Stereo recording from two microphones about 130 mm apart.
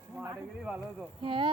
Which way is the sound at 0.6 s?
5° right (ahead or behind).